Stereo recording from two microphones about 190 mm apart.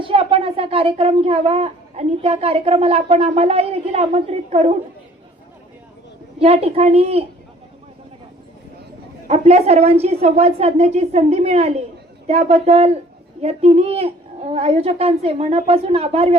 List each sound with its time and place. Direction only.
0.0 s speech: 30° right (ahead or behind)
6.4 s speech: 30° right (ahead or behind)
9.2 s speech: 35° right (ahead or behind)